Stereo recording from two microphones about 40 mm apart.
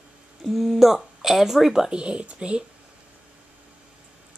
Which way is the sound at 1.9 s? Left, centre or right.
Right.